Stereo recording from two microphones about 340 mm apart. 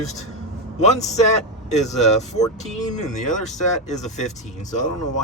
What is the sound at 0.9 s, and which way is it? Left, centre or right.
Speech, centre.